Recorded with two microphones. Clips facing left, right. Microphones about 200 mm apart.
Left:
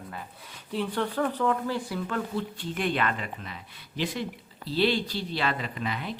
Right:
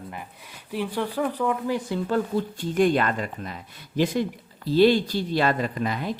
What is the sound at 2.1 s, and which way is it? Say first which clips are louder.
Speech: right 9 dB; 45° right (ahead or behind).